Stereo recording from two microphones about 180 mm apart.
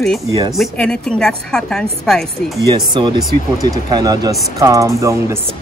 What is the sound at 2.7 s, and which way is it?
Speech, 25° right (ahead or behind).